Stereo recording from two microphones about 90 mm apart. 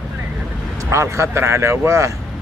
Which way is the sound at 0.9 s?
30° right (ahead or behind).